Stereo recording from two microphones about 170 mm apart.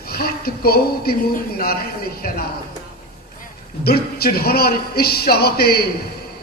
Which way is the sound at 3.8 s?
65° left (ahead or behind).